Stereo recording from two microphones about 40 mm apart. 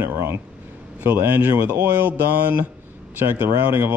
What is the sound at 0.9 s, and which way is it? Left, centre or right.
Speech, right.